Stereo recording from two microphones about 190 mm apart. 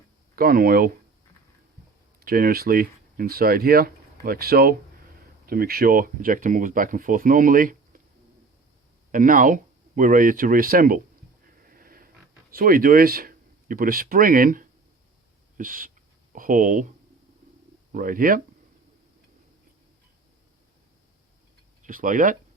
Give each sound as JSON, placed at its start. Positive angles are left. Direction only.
{"t": 0.3, "sound": "speech", "side_deg": -50}
{"t": 2.2, "sound": "speech", "side_deg": -50}
{"t": 9.1, "sound": "speech", "side_deg": -45}
{"t": 11.6, "sound": "a sound", "side_deg": -50}
{"t": 15.5, "sound": "speech", "side_deg": -45}
{"t": 17.9, "sound": "speech", "side_deg": -45}
{"t": 21.8, "sound": "speech", "side_deg": -45}